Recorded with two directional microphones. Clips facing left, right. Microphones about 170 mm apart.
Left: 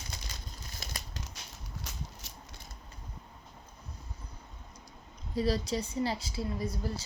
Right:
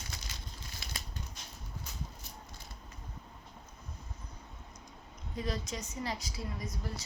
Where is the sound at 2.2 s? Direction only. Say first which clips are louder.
Right 1 dB; 90° left.